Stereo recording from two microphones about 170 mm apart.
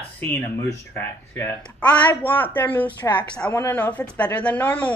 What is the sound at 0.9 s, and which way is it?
Speech, 15° left (ahead or behind).